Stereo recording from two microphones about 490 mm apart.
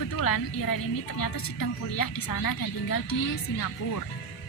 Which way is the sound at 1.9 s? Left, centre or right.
Left.